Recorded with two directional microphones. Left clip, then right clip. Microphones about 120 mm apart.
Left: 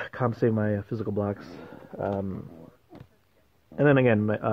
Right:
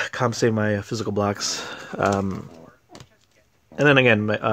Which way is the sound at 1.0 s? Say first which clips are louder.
Right 7 dB; 35° right (ahead or behind).